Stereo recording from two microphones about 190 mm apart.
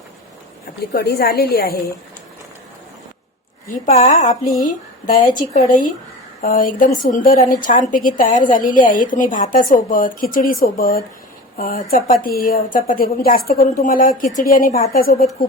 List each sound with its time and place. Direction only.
0.9 s a woman's voice: 55° left (ahead or behind)
3.8 s a woman's voice: 35° left (ahead or behind)